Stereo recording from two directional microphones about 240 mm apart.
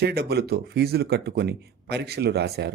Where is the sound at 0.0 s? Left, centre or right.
Right.